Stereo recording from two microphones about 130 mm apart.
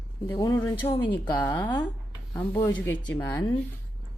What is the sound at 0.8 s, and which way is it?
Speech, 45° left (ahead or behind).